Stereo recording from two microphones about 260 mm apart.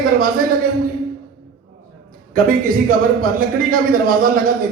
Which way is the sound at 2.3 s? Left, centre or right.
Right.